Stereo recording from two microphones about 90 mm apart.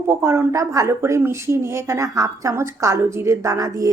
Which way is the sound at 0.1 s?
25° right (ahead or behind).